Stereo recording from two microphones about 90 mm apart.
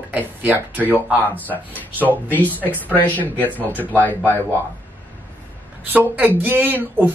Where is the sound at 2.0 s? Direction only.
20° left (ahead or behind).